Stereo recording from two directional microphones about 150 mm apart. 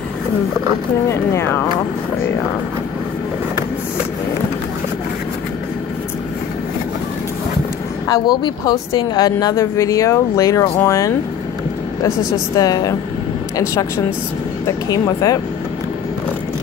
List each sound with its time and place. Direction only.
1.0 s speech: 20° left (ahead or behind)
8.1 s speech: 25° left (ahead or behind)
12.5 s speech: 25° left (ahead or behind)